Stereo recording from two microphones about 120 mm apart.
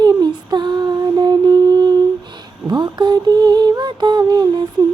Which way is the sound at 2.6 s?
40° right (ahead or behind).